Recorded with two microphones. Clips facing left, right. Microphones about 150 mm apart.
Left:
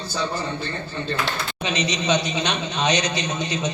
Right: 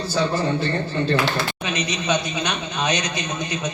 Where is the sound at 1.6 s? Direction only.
25° left (ahead or behind).